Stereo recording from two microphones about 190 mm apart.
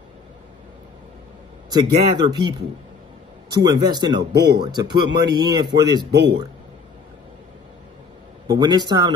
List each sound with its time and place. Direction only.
1.7 s a man's voice: 20° right (ahead or behind)
4.2 s speech: 60° right (ahead or behind)
4.6 s a man's voice: 20° right (ahead or behind)
6.1 s speech: 60° right (ahead or behind)
8.5 s a man's voice: 20° right (ahead or behind)